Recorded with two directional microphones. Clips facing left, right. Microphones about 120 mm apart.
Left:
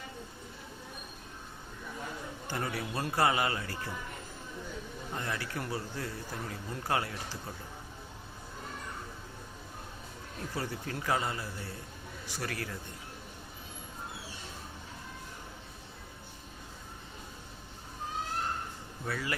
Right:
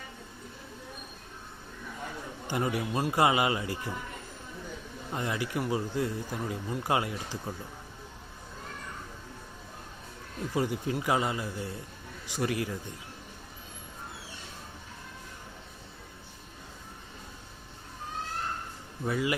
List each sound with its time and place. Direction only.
2.5 s speech: 15° right (ahead or behind)
5.1 s speech: 15° right (ahead or behind)
10.5 s speech: 15° right (ahead or behind)
19.0 s speech: 15° right (ahead or behind)